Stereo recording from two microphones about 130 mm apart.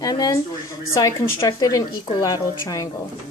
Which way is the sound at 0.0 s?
30° left (ahead or behind).